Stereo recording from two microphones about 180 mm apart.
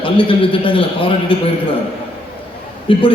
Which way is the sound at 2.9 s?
30° left (ahead or behind).